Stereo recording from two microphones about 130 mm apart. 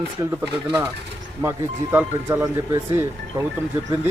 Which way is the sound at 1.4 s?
20° right (ahead or behind).